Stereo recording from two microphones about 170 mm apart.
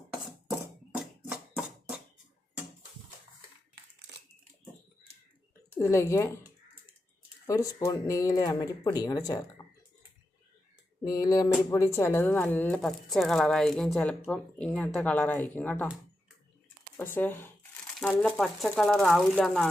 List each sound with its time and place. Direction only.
1.3 s a sound: 5° right (ahead or behind)
5.7 s speech: 20° left (ahead or behind)
7.4 s speech: 20° left (ahead or behind)
11.0 s speech: 20° left (ahead or behind)
17.0 s speech: 10° left (ahead or behind)
17.9 s crumpling: 5° right (ahead or behind)
18.2 s speech: centre (ahead or behind)